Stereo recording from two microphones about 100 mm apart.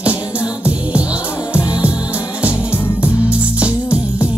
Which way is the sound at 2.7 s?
20° left (ahead or behind).